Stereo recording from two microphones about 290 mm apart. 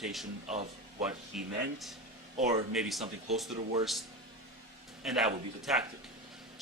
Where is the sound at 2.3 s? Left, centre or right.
Right.